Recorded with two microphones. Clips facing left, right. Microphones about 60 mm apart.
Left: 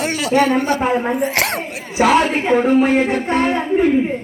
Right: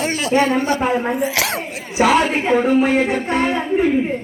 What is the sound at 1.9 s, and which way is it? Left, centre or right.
A woman's voice, centre.